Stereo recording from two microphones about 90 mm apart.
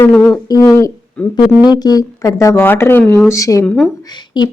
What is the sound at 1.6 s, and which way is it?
Speech, 50° left (ahead or behind).